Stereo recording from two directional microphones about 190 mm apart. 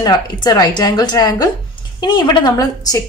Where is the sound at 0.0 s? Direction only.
20° left (ahead or behind).